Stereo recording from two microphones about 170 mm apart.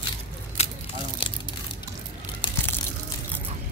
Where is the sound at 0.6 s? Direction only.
35° left (ahead or behind).